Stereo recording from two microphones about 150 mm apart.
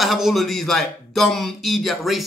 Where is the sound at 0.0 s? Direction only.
Centre (ahead or behind).